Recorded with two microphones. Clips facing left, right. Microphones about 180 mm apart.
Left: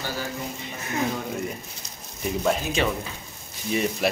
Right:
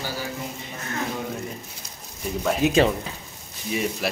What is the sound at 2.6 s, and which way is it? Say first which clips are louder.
Speech: right 9 dB; 70° right (ahead or behind).